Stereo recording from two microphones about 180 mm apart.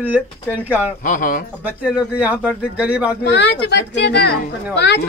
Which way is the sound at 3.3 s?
65° left (ahead or behind).